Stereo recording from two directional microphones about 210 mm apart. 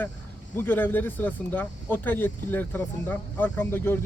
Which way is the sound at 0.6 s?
10° left (ahead or behind).